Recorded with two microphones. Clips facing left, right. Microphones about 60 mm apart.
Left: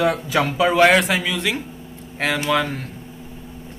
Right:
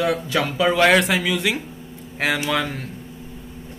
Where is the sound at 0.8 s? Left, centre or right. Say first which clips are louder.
Left 1 dB; centre.